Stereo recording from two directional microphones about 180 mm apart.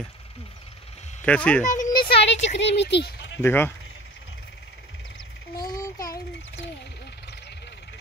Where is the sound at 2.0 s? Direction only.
75° left (ahead or behind).